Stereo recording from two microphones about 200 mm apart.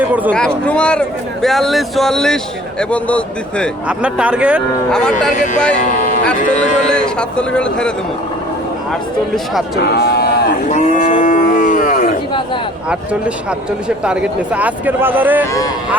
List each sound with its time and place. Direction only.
0.0 s speech: 10° right (ahead or behind)
0.3 s a man's voice: 5° left (ahead or behind)
3.8 s speech: 5° right (ahead or behind)
5.8 s a sound: 40° left (ahead or behind)
6.9 s speech: 5° left (ahead or behind)
9.7 s speech: 55° left (ahead or behind)
10.7 s livestock: 35° left (ahead or behind)
13.8 s speech: 5° right (ahead or behind)